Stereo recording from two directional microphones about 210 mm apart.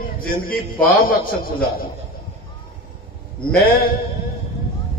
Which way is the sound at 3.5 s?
45° left (ahead or behind).